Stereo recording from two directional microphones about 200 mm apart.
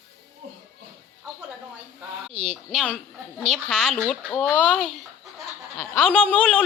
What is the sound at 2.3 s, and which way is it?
Speech, 30° right (ahead or behind).